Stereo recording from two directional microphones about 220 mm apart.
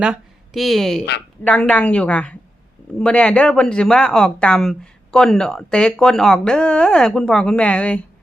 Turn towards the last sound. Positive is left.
turn(degrees=5)  # may be behind; listen again after turning